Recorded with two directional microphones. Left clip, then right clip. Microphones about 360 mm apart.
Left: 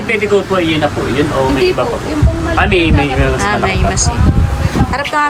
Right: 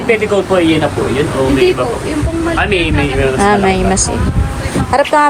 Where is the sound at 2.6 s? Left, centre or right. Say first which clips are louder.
Left 4 dB; left.